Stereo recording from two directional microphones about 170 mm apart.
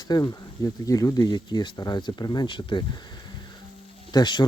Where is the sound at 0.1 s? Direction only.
20° left (ahead or behind).